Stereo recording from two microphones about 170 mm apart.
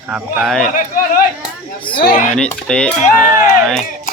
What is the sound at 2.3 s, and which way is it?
Speech, 5° left (ahead or behind).